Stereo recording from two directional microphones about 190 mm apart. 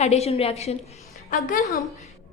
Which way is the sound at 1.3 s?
45° left (ahead or behind).